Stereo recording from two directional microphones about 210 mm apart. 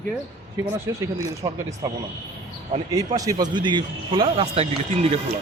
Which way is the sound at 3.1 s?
15° right (ahead or behind).